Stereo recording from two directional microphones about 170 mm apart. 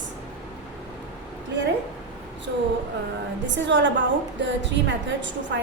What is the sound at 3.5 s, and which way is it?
A woman's voice, 90° right.